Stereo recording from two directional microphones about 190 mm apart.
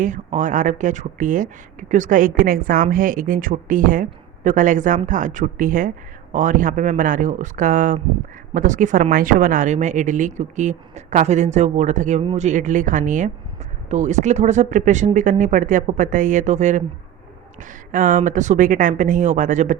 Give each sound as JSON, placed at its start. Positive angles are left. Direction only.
{"t": 0.0, "sound": "a woman's voice", "side_deg": -40}